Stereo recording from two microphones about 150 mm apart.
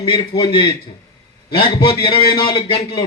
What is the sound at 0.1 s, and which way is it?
Speech, 30° left (ahead or behind).